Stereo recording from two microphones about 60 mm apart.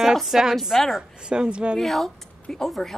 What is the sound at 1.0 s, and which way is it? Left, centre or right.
Speech, centre.